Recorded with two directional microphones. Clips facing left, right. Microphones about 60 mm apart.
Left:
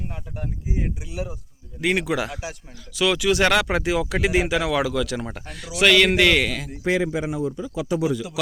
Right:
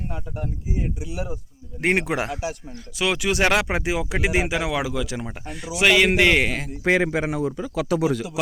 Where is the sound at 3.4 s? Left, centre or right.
Centre.